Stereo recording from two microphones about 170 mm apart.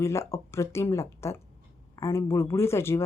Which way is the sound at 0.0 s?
15° left (ahead or behind).